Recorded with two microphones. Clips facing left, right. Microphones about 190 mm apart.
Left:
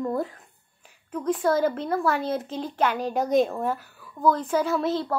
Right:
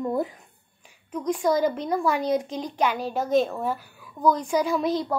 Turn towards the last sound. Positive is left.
turn(degrees=-15)  # may be behind; listen again after turning